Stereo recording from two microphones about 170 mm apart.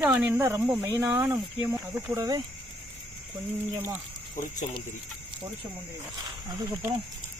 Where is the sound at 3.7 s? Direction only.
25° right (ahead or behind).